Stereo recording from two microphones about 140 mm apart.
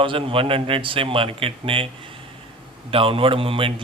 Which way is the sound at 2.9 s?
40° right (ahead or behind).